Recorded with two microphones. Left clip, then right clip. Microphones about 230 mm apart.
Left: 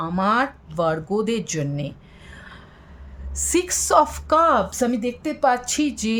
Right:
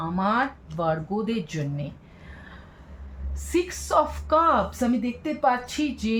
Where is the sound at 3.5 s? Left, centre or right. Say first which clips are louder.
Left 5 dB; left.